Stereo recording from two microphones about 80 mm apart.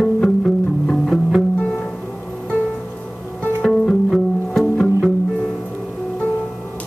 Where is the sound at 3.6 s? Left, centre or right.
Centre.